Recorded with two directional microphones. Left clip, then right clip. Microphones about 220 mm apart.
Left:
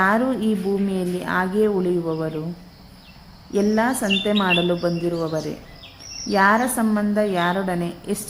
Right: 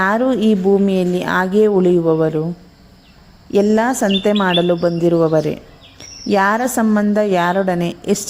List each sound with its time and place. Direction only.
0.0 s speech: 30° right (ahead or behind)
3.5 s speech: 35° right (ahead or behind)